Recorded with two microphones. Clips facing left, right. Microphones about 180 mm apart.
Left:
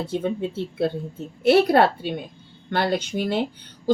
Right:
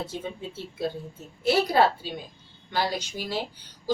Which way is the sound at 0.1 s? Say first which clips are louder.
Left 10 dB; 60° left (ahead or behind).